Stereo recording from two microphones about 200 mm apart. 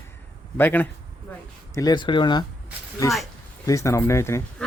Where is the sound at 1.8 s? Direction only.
20° left (ahead or behind).